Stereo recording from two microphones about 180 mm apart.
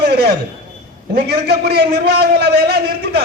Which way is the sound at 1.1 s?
65° right (ahead or behind).